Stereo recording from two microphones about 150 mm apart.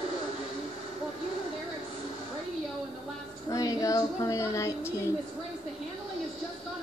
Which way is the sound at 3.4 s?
25° left (ahead or behind).